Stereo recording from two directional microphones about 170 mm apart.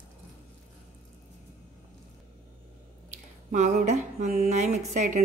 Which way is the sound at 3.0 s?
45° right (ahead or behind).